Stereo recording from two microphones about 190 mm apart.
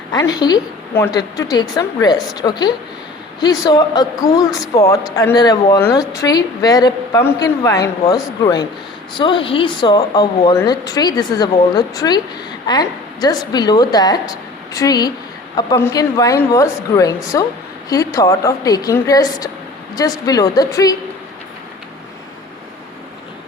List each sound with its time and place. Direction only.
0.1 s a woman's voice: 20° left (ahead or behind)
9.1 s a woman's voice: 25° left (ahead or behind)